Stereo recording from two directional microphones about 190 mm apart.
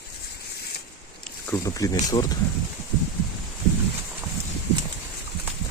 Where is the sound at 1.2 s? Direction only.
15° left (ahead or behind).